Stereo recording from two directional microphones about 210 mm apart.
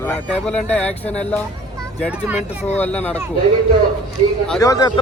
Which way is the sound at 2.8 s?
5° left (ahead or behind).